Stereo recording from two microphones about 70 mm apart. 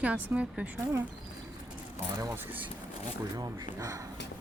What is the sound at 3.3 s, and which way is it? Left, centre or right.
Speech, right.